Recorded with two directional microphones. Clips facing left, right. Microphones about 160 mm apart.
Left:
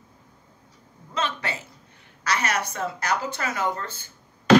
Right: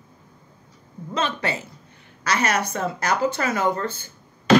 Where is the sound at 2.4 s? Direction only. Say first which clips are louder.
Right 4 dB; 50° right (ahead or behind).